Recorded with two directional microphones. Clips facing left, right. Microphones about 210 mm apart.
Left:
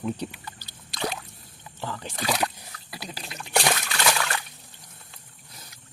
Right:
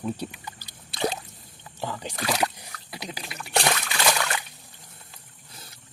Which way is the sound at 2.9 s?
20° right (ahead or behind).